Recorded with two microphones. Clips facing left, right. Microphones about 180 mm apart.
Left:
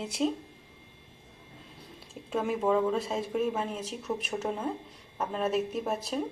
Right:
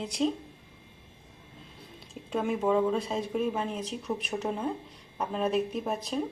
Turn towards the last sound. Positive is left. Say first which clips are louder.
# even
turn(degrees=5)  # may be behind; listen again after turning